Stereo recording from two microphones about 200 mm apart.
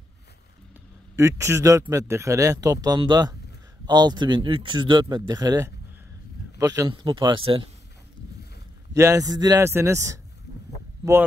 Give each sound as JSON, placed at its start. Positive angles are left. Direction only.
{"t": 1.1, "sound": "speech", "side_deg": -15}
{"t": 8.9, "sound": "speech", "side_deg": -15}